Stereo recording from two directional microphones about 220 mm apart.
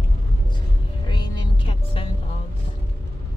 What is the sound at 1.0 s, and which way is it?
Music, 20° left (ahead or behind).